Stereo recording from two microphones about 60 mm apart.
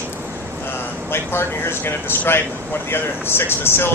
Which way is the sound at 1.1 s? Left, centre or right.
Left.